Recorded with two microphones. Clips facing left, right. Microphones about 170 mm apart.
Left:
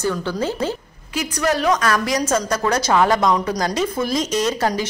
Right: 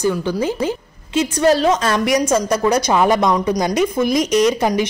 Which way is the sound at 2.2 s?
15° right (ahead or behind).